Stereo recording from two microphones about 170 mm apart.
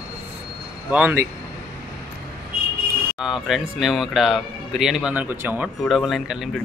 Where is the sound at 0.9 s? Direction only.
10° right (ahead or behind).